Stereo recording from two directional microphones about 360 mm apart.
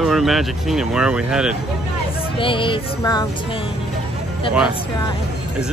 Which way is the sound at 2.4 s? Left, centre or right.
Centre.